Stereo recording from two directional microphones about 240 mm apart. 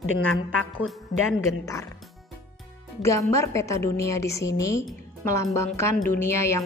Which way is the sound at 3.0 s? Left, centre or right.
Centre.